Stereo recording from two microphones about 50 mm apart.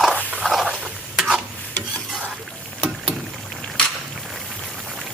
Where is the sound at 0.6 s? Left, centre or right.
Centre.